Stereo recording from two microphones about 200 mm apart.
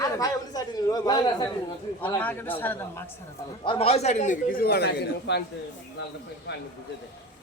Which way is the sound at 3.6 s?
25° left (ahead or behind).